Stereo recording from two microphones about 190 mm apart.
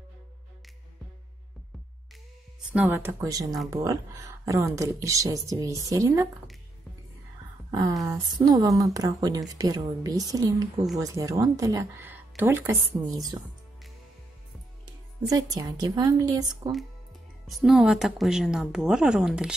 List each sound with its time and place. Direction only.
2.7 s speech: 10° right (ahead or behind)
7.7 s speech: 20° right (ahead or behind)
15.2 s speech: 20° right (ahead or behind)
17.5 s a woman's voice: centre (ahead or behind)